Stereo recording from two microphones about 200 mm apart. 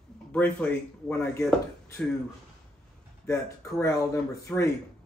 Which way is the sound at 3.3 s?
15° left (ahead or behind).